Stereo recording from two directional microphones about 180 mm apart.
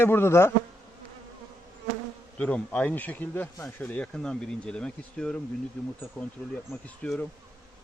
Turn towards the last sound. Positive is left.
turn(degrees=5)  # may be behind; listen again after turning